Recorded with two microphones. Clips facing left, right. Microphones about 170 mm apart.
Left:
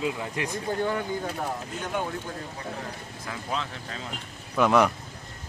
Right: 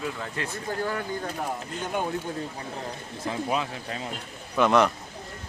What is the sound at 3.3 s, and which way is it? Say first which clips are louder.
Speech: right 5 dB; 15° right (ahead or behind).